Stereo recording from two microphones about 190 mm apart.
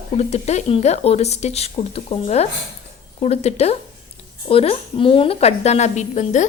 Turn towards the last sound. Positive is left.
turn(degrees=40)  # may be behind; listen again after turning